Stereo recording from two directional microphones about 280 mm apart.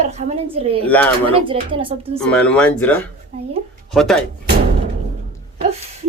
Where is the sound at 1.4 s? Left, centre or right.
Centre.